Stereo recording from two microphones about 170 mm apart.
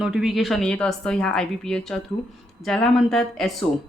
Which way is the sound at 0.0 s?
5° right (ahead or behind).